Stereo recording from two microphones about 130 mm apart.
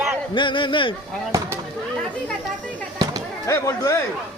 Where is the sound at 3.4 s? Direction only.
25° left (ahead or behind).